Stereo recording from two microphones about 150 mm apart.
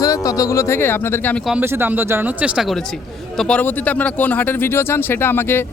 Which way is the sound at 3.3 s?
5° left (ahead or behind).